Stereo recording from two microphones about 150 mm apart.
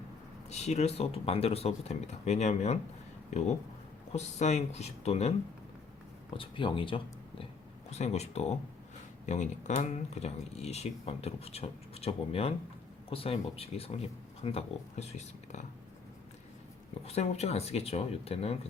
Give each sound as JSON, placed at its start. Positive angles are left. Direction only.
{"t": 0.5, "sound": "speech", "side_deg": 45}
{"t": 4.1, "sound": "speech", "side_deg": 50}
{"t": 6.3, "sound": "speech", "side_deg": 35}
{"t": 7.9, "sound": "speech", "side_deg": 45}
{"t": 17.1, "sound": "speech", "side_deg": 45}